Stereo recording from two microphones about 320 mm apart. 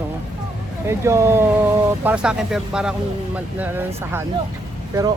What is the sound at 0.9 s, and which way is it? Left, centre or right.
Speech, centre.